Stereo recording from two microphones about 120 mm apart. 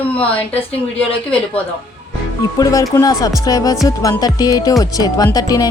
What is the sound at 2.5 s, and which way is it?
Speech, 30° left (ahead or behind).